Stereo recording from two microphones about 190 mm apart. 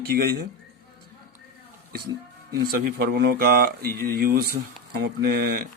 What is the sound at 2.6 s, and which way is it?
Speech, 55° right (ahead or behind).